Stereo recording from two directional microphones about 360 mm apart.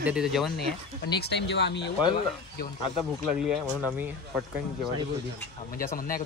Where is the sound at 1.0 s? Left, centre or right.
Left.